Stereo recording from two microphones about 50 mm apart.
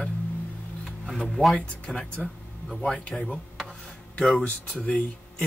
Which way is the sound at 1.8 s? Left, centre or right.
Centre.